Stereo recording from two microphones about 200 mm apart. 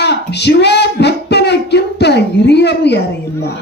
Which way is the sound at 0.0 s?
55° left (ahead or behind).